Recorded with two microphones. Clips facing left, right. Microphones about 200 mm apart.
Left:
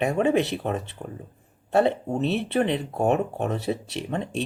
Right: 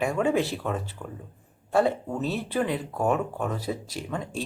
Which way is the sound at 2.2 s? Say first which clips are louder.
Left 4 dB; 65° left (ahead or behind).